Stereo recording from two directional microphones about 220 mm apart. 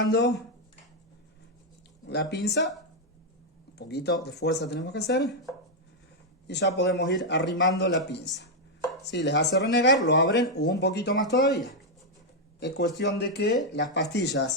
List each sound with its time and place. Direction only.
0.0 s speech: 50° left (ahead or behind)
2.0 s speech: 50° left (ahead or behind)
3.8 s speech: 50° left (ahead or behind)
6.5 s speech: 50° left (ahead or behind)
12.5 s speech: 50° left (ahead or behind)